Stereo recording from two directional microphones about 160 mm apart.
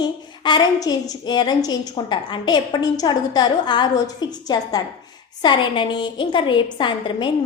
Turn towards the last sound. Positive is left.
turn(degrees=30)  # may be behind; listen again after turning